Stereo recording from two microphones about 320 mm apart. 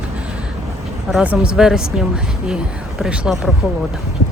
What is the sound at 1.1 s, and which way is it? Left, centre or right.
Speech, centre.